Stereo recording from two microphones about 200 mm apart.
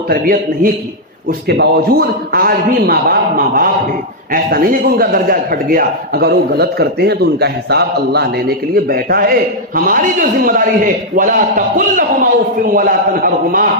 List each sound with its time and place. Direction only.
0.1 s a man's voice: 45° right (ahead or behind)